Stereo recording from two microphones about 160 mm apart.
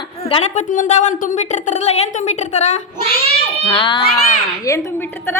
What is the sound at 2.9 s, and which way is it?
Speech, 70° left (ahead or behind).